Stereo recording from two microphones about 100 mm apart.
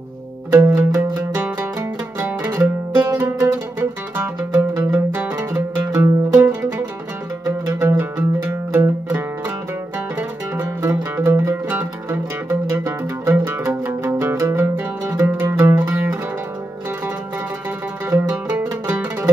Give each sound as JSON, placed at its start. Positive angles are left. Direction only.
{"t": 0.5, "sound": "music", "side_deg": -30}
{"t": 1.4, "sound": "music", "side_deg": -15}
{"t": 4.4, "sound": "music", "side_deg": -30}
{"t": 5.1, "sound": "music", "side_deg": -20}
{"t": 5.5, "sound": "music", "side_deg": -35}
{"t": 7.4, "sound": "music", "side_deg": -35}
{"t": 8.0, "sound": "music", "side_deg": -20}
{"t": 18.1, "sound": "music", "side_deg": -20}